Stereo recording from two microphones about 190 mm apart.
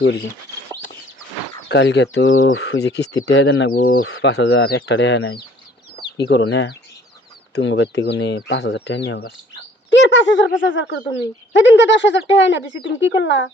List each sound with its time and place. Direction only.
1.6 s speech: 65° left (ahead or behind)
3.7 s speech: 50° left (ahead or behind)
4.0 s speech: 80° left
6.0 s speech: 60° left (ahead or behind)
9.9 s speech: 75° left (ahead or behind)